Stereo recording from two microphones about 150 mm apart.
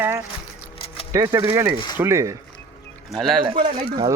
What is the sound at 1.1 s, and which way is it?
Speech, 25° right (ahead or behind).